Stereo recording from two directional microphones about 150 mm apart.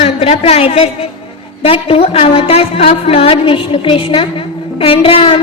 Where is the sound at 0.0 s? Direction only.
40° left (ahead or behind).